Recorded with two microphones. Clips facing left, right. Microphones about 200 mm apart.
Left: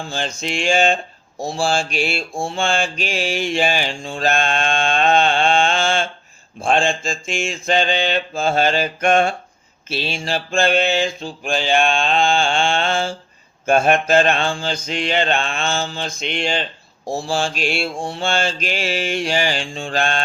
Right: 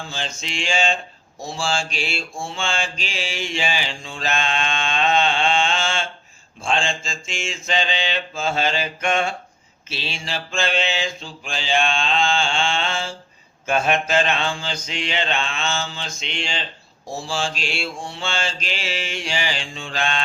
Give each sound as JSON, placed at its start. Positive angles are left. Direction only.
{"t": 0.1, "sound": "mantra", "side_deg": 55}